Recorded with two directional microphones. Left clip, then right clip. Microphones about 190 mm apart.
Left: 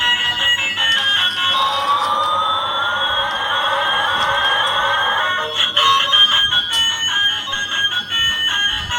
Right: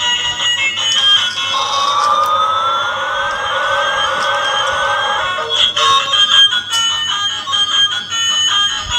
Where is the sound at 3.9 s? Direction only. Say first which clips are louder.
Right 1 dB; 25° right (ahead or behind).